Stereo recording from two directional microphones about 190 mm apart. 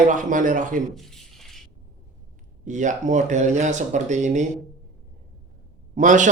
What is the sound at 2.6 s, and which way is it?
Speech, 40° right (ahead or behind).